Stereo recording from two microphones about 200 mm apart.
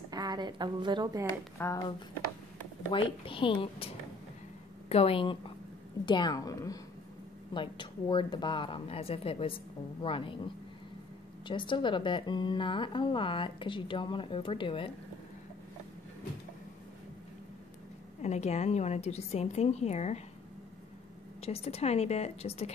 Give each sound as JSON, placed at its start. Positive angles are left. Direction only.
{"t": 0.1, "sound": "a woman's voice", "side_deg": -20}
{"t": 1.6, "sound": "a woman's voice", "side_deg": 20}
{"t": 18.2, "sound": "a woman's voice", "side_deg": 35}
{"t": 21.4, "sound": "a woman's voice", "side_deg": 30}